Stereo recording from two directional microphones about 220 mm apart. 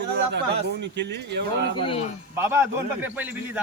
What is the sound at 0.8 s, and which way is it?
Speech, 50° right (ahead or behind).